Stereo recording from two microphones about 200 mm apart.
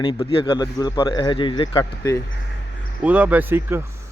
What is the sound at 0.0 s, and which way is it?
A man's voice, 25° left (ahead or behind).